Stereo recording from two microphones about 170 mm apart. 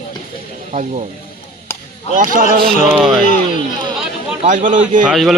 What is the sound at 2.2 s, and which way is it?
Speech, 55° right (ahead or behind).